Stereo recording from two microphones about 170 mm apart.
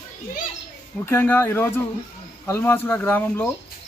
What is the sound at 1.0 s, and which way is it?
Speech, 10° left (ahead or behind).